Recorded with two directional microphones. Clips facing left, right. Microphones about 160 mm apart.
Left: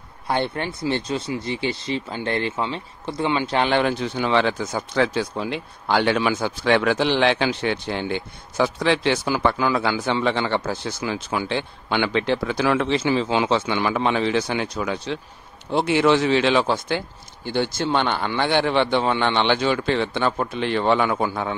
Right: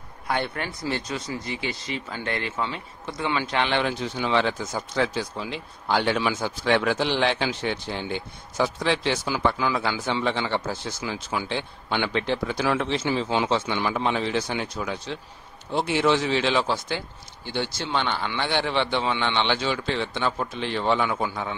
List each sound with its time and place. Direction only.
0.3 s speech: 30° left (ahead or behind)
2.5 s speech: 20° left (ahead or behind)
3.1 s a man's voice: 30° left (ahead or behind); by 21.5 s 55° left (ahead or behind)